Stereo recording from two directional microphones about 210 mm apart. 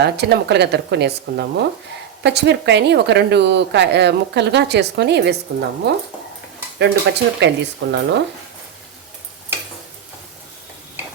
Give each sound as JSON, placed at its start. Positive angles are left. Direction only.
{"t": 0.0, "sound": "speech", "side_deg": -55}